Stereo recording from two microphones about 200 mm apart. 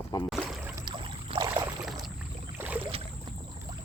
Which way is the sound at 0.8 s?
25° right (ahead or behind).